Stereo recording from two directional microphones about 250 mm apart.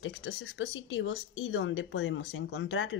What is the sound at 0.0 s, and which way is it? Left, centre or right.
Speech, left.